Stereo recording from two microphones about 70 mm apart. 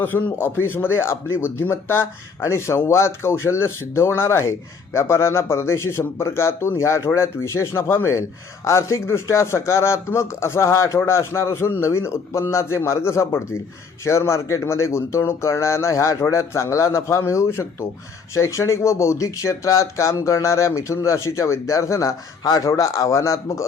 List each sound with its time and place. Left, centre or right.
0.0 s a man's voice: left
22.4 s speech: left